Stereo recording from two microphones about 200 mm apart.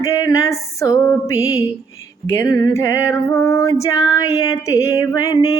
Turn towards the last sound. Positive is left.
turn(degrees=15)  # may be behind; listen again after turning